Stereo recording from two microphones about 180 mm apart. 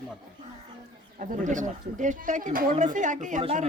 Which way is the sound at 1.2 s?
45° right (ahead or behind).